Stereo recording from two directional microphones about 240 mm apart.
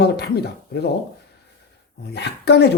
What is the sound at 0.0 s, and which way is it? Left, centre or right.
Speech, left.